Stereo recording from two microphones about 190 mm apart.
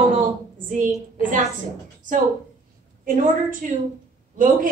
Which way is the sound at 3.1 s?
45° right (ahead or behind).